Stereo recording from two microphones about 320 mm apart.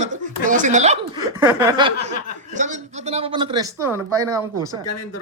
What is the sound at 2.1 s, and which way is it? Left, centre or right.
Speech, right.